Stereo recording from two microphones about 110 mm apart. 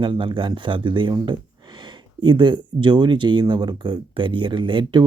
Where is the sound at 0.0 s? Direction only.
50° right (ahead or behind).